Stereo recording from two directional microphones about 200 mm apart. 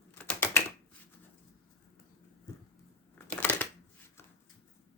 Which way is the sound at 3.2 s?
10° left (ahead or behind).